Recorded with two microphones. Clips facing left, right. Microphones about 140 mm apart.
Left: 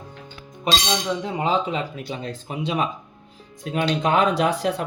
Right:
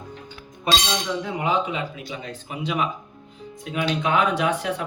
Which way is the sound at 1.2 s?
30° left (ahead or behind).